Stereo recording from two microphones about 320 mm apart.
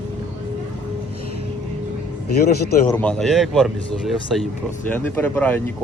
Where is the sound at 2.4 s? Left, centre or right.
Left.